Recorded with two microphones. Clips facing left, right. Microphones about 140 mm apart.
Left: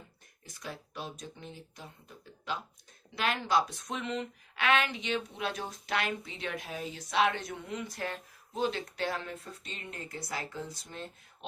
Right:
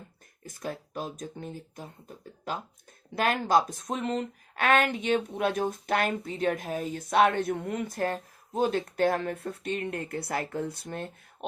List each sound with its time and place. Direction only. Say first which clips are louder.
0.4 s speech: right 7 dB; 50° right (ahead or behind)